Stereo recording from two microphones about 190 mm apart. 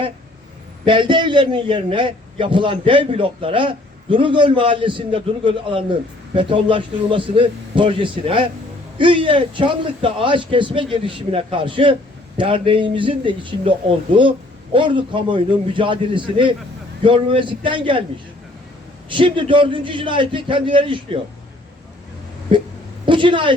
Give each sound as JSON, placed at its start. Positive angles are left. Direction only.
{"t": 0.9, "sound": "a man's voice", "side_deg": -25}
{"t": 19.0, "sound": "a man's voice", "side_deg": -25}
{"t": 22.5, "sound": "a man's voice", "side_deg": -25}